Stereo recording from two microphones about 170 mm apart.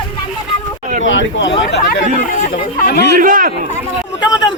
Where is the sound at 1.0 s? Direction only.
90° left.